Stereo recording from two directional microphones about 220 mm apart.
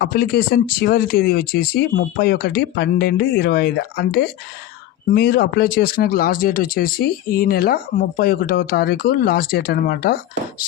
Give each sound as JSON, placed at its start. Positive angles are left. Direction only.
{"t": 0.0, "sound": "speech", "side_deg": 45}